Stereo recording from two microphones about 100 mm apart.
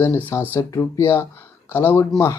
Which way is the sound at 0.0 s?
20° left (ahead or behind).